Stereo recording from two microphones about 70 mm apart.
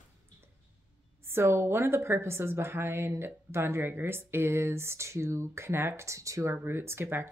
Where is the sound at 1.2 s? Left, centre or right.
Right.